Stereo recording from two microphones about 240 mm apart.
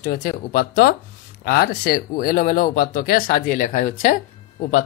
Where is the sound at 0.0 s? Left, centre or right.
Left.